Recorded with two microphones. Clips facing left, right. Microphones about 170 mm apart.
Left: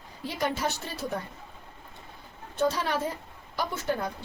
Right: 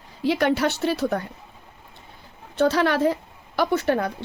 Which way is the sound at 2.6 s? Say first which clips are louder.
Right 8 dB; 75° right (ahead or behind).